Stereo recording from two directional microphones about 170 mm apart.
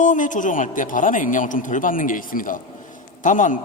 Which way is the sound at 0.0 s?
50° left (ahead or behind).